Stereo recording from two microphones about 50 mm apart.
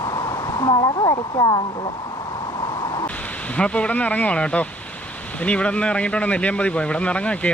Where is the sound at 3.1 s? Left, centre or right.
Left.